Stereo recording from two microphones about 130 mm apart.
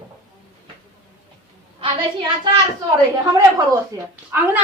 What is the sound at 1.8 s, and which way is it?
Speech, 35° right (ahead or behind).